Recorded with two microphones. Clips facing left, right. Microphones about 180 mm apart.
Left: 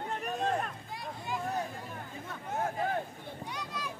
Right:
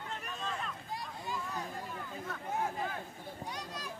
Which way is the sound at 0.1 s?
60° left (ahead or behind).